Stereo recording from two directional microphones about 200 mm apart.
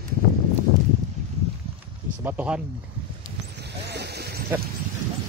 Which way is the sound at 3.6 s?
55° right (ahead or behind).